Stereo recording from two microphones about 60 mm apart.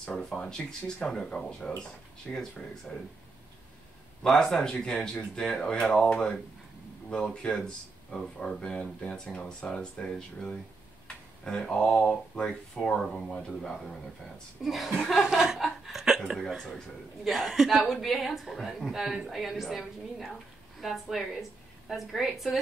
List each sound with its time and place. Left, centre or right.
0.0 s speech: centre
4.2 s speech: centre
12.0 s speech: left
12.4 s speech: centre
14.6 s a woman's voice: centre
15.2 s chuckle: centre
16.2 s a woman's voice: centre